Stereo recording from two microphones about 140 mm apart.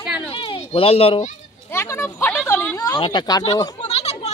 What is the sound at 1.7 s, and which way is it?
A woman's voice, 20° left (ahead or behind).